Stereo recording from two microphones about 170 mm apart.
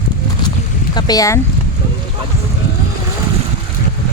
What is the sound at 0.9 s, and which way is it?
Speech, 25° left (ahead or behind).